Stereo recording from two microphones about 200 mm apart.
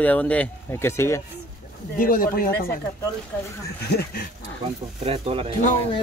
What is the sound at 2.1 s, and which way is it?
Speech, 45° left (ahead or behind).